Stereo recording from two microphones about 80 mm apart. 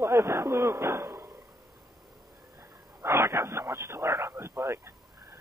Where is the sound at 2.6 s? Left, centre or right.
Right.